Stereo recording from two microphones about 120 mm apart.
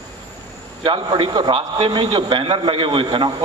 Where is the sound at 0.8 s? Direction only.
45° right (ahead or behind).